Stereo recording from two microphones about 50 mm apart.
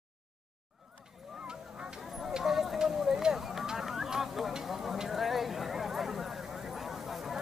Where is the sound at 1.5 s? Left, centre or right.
Centre.